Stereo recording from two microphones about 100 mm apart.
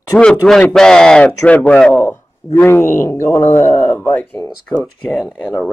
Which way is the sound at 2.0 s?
25° left (ahead or behind).